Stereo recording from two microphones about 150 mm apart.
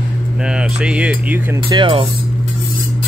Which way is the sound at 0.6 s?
5° right (ahead or behind).